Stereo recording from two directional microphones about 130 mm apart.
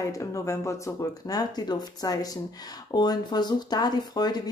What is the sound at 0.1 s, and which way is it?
Speech, 25° left (ahead or behind).